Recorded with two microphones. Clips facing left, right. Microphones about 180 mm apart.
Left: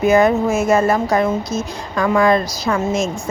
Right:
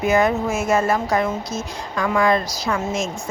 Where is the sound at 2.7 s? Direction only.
60° left (ahead or behind).